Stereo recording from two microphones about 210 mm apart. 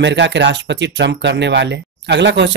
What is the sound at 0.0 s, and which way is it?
Speech, 55° right (ahead or behind).